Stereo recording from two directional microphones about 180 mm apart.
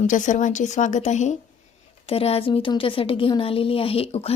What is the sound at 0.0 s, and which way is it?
Speech, 45° left (ahead or behind).